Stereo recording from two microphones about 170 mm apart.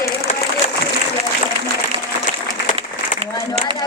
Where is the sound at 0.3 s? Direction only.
40° left (ahead or behind).